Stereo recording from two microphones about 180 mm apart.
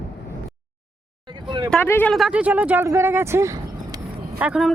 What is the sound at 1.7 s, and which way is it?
Speech, 10° left (ahead or behind).